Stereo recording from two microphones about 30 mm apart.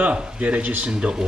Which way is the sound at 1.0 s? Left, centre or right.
Right.